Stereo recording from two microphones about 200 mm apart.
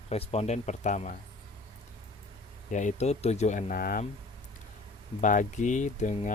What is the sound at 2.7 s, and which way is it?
Speech, 35° left (ahead or behind).